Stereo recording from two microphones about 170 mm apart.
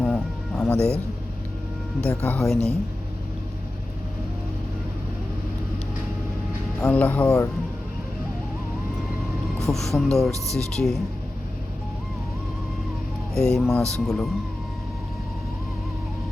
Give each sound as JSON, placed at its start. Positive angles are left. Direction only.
{"t": 0.0, "sound": "music", "side_deg": 5}
{"t": 2.0, "sound": "speech", "side_deg": 10}
{"t": 6.7, "sound": "speech", "side_deg": 5}
{"t": 9.6, "sound": "speech", "side_deg": 0}
{"t": 10.3, "sound": "speech", "side_deg": -20}
{"t": 10.6, "sound": "speech", "side_deg": 5}
{"t": 13.3, "sound": "speech", "side_deg": 5}